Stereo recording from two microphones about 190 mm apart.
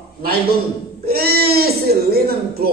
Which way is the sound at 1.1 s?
55° right (ahead or behind).